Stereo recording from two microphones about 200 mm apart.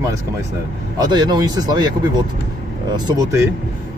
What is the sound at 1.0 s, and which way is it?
Speech, 20° right (ahead or behind).